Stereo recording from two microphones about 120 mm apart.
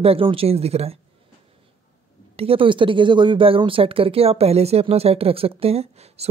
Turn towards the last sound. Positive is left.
turn(degrees=-60)  # may be behind; listen again after turning